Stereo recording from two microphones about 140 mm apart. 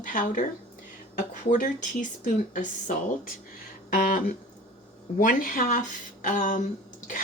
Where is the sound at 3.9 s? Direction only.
80° left.